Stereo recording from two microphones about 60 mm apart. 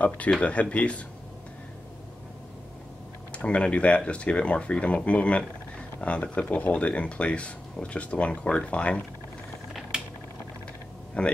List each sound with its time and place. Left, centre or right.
0.4 s speech: left
3.3 s speech: centre
9.9 s a sound: centre
11.2 s speech: centre